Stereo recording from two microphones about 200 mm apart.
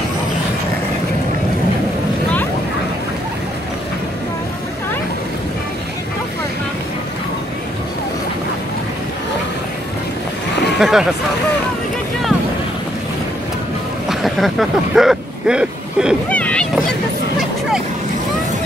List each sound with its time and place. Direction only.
10.8 s speech: centre (ahead or behind)
14.0 s speech: centre (ahead or behind)
16.3 s speech: 5° left (ahead or behind)